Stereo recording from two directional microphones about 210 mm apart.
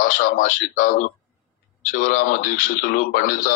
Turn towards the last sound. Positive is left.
turn(degrees=40)  # may be behind; listen again after turning